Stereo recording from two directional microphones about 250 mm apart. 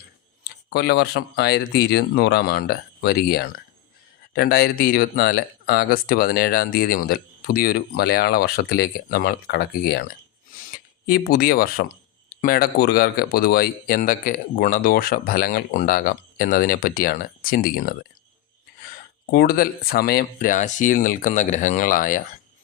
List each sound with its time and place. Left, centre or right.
0.4 s speech: left
11.0 s speech: left
19.3 s speech: left